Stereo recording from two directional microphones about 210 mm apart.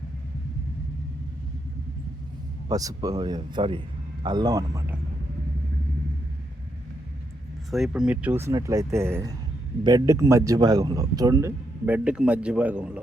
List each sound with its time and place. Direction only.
2.6 s a man's voice: 15° right (ahead or behind)
7.7 s a man's voice: centre (ahead or behind)